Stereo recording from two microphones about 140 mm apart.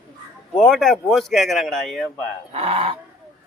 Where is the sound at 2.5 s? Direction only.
45° right (ahead or behind).